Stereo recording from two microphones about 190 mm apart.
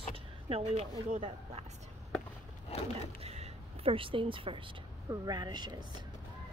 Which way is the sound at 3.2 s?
35° right (ahead or behind).